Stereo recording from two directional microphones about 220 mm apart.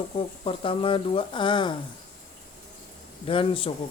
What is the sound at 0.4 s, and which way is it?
Speech, 25° left (ahead or behind).